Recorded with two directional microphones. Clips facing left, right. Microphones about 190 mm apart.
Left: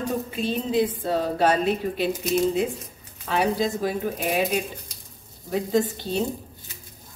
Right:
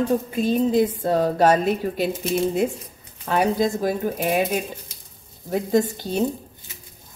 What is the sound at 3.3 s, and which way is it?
Speech, 45° right (ahead or behind).